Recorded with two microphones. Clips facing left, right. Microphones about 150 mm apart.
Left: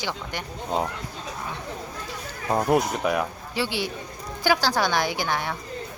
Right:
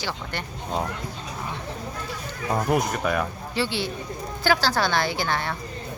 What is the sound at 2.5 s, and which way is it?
Speech, 20° left (ahead or behind).